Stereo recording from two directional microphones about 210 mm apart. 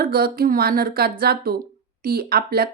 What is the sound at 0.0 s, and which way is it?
Speech, 45° right (ahead or behind).